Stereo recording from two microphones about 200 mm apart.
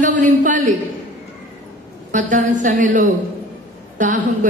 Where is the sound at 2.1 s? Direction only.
40° right (ahead or behind).